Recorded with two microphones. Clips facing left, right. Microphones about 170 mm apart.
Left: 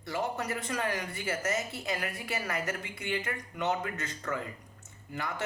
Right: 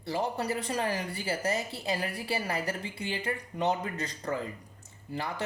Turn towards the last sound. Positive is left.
turn(degrees=-35)  # may be behind; listen again after turning